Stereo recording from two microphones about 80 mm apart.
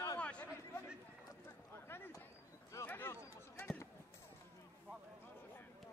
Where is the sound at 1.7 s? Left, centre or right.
Left.